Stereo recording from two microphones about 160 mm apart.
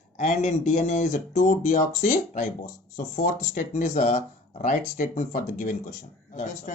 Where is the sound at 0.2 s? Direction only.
50° left (ahead or behind).